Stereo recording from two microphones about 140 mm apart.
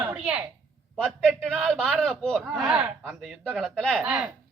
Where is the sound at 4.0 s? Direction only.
10° right (ahead or behind).